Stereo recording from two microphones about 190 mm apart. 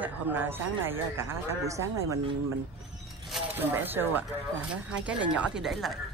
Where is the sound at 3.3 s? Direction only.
5° right (ahead or behind).